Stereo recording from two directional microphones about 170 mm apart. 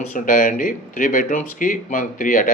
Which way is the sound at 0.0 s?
50° left (ahead or behind).